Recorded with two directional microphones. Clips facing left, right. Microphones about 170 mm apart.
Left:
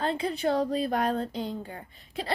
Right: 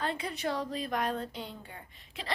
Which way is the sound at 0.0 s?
30° left (ahead or behind).